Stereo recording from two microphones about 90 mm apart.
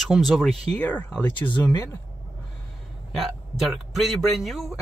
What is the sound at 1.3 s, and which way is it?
Speech, 60° left (ahead or behind).